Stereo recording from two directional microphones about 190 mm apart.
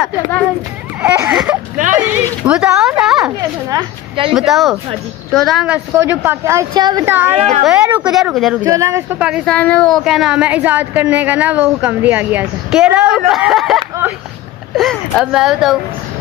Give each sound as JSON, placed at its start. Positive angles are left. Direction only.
{"t": 1.0, "sound": "a sound", "side_deg": -10}
{"t": 4.3, "sound": "speech", "side_deg": 0}
{"t": 5.9, "sound": "speech", "side_deg": -15}
{"t": 7.1, "sound": "speech", "side_deg": -10}
{"t": 8.6, "sound": "speech", "side_deg": -15}